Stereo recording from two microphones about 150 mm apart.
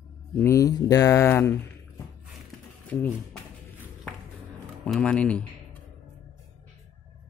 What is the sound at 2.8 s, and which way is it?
Speech, 10° left (ahead or behind).